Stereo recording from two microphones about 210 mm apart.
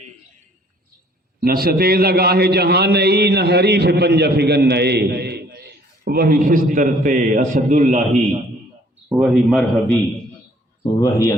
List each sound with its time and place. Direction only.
1.4 s a man's voice: 45° right (ahead or behind)
9.1 s a man's voice: centre (ahead or behind)
11.0 s speech: 15° left (ahead or behind)